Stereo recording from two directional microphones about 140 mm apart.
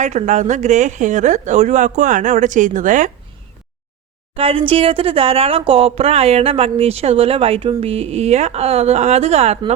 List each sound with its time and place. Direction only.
0.0 s speech: 55° right (ahead or behind)
4.4 s speech: 40° right (ahead or behind)